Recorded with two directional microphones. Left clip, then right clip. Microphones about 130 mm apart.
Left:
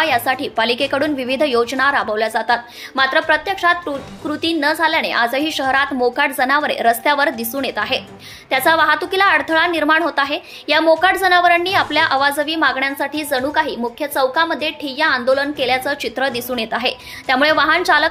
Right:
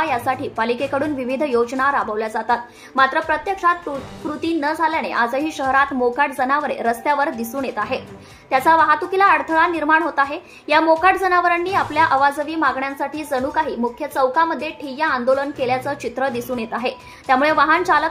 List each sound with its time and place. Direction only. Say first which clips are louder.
0.0 s a woman's voice: left 4 dB; 20° left (ahead or behind)